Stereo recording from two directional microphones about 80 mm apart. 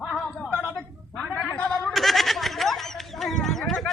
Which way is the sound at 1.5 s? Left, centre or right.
Centre.